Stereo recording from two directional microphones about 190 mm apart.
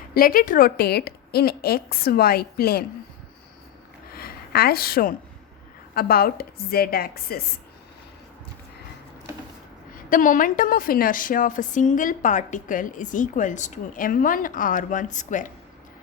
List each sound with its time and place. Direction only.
0.1 s a woman's voice: 50° left (ahead or behind)
4.1 s a sound: 55° left (ahead or behind)
5.9 s a woman's voice: 55° left (ahead or behind)
9.9 s a woman's voice: 45° left (ahead or behind)